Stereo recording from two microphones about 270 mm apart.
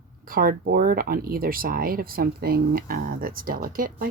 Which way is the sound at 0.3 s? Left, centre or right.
Right.